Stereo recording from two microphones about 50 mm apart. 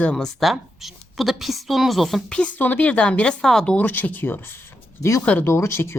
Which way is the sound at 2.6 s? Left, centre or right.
Left.